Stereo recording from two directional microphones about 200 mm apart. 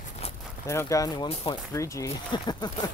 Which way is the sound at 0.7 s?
15° left (ahead or behind).